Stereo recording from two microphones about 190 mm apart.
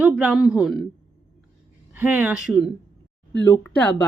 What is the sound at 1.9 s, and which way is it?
Speech, 10° right (ahead or behind).